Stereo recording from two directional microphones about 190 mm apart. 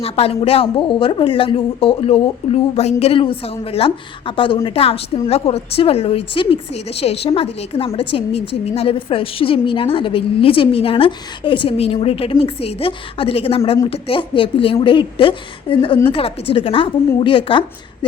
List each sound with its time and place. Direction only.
0.0 s a woman's voice: 30° left (ahead or behind)